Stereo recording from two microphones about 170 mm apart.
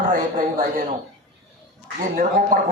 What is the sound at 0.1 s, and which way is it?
Speech, 55° right (ahead or behind).